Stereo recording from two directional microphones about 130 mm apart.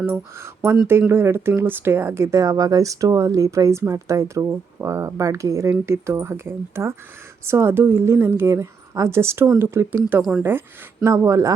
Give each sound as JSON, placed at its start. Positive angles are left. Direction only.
{"t": 0.0, "sound": "speech", "side_deg": -20}